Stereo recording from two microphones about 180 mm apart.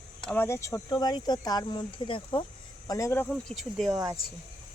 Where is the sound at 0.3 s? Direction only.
10° left (ahead or behind).